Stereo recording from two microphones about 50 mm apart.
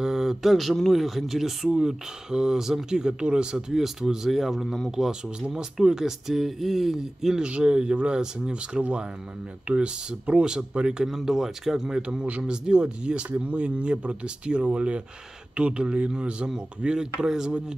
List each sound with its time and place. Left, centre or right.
0.0 s speech: centre
3.7 s speech: centre
7.4 s speech: right
11.1 s speech: centre